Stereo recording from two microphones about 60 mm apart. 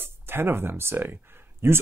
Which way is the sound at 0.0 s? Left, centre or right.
Right.